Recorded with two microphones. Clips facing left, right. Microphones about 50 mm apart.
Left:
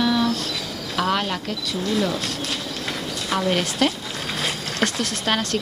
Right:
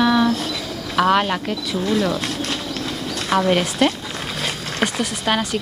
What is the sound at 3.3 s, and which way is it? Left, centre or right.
Speech, right.